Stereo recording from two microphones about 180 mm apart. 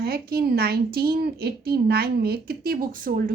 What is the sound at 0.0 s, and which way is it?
A woman's voice, 60° right (ahead or behind).